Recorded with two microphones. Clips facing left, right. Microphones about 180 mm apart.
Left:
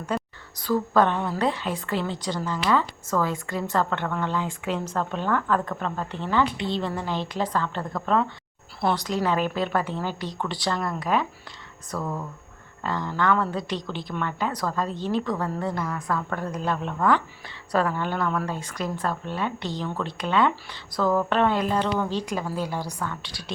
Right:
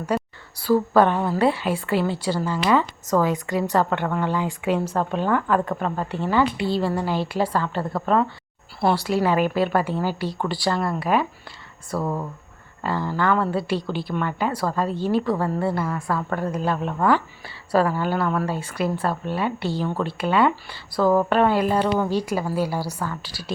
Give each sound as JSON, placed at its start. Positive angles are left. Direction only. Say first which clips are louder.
{"t": 0.6, "sound": "a woman's voice", "louder": "right 4 dB", "side_deg": -10}
{"t": 11.9, "sound": "speech", "louder": "right 5 dB", "side_deg": -25}
{"t": 12.8, "sound": "a woman's voice", "louder": "right 2 dB", "side_deg": -5}